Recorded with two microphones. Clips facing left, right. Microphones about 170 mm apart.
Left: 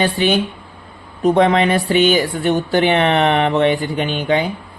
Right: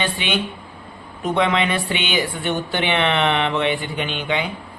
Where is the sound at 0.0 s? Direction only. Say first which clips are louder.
Left 7 dB; 40° left (ahead or behind).